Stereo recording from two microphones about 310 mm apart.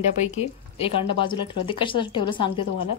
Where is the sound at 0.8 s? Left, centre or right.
Centre.